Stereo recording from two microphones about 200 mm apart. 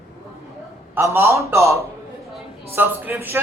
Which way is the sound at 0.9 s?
15° right (ahead or behind).